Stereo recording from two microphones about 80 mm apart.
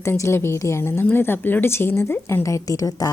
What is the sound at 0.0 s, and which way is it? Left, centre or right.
A woman's voice, left.